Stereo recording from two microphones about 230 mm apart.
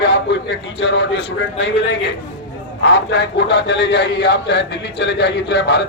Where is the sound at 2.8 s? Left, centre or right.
Left.